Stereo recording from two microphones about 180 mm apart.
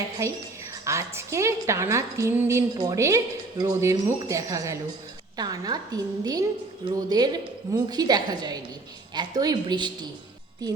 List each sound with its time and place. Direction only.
0.2 s a woman's voice: 15° right (ahead or behind)